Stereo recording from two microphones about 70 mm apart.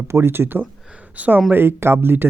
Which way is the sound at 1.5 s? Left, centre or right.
Right.